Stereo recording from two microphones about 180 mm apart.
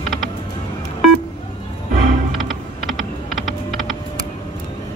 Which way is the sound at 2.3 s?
Centre (ahead or behind).